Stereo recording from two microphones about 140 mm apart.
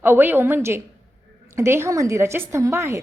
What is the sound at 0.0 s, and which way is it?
A woman's voice, 15° right (ahead or behind).